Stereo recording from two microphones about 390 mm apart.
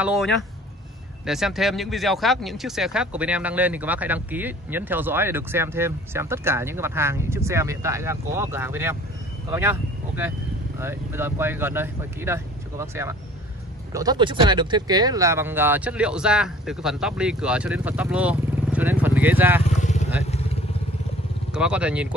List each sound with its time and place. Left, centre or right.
0.0 s speech: centre
19.8 s vehicle: centre
21.5 s speech: centre